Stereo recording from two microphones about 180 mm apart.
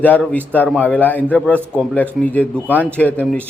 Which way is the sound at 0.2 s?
5° left (ahead or behind).